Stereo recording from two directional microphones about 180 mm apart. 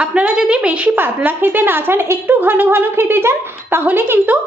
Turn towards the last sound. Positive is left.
turn(degrees=-10)  # may be behind; listen again after turning